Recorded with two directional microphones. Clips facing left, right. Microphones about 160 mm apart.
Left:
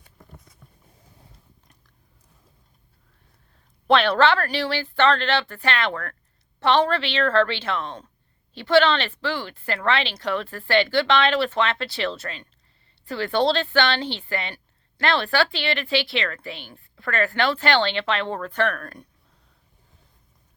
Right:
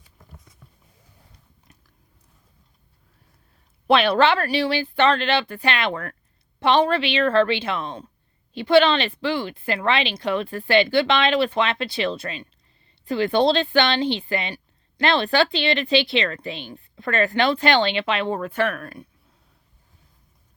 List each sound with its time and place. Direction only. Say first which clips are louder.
3.8 s a woman's voice: right 1 dB; 10° right (ahead or behind)